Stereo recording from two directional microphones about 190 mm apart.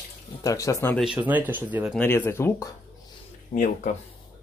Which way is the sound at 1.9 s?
10° left (ahead or behind).